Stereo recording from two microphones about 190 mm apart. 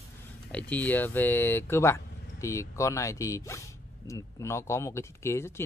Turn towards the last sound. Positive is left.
turn(degrees=15)  # may be behind; listen again after turning